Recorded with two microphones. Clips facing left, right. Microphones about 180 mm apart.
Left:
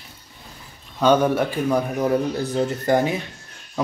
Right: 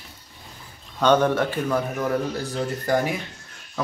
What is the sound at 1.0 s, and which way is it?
Speech, 10° left (ahead or behind).